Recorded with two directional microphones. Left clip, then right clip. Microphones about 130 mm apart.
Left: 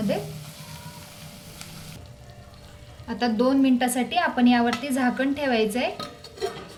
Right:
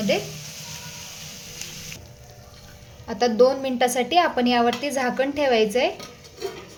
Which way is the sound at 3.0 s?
45° right (ahead or behind).